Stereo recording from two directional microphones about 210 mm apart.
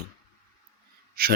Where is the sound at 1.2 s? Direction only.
45° right (ahead or behind).